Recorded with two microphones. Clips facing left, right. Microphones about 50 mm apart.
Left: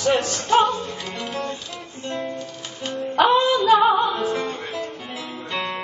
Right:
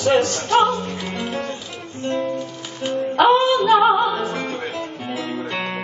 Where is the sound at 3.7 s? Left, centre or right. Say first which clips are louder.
Right 1 dB; centre.